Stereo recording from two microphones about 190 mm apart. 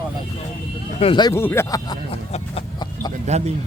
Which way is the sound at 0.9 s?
25° left (ahead or behind).